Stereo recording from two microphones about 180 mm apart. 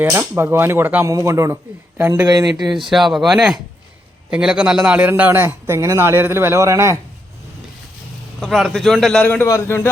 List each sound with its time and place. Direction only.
0.0 s a man's voice: 15° right (ahead or behind)
2.9 s a man's voice: centre (ahead or behind); by 7.0 s 15° right (ahead or behind)
8.4 s a man's voice: centre (ahead or behind)